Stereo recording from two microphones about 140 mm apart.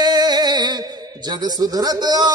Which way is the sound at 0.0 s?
30° right (ahead or behind).